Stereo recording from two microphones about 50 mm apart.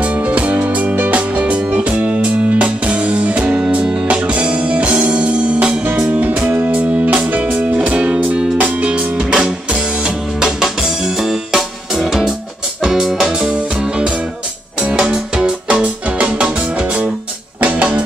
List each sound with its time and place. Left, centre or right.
0.0 s music: right